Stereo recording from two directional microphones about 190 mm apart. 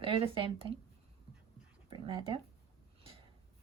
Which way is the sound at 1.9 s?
25° right (ahead or behind).